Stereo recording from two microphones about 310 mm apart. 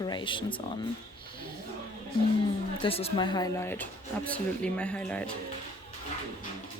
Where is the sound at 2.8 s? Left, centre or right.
Centre.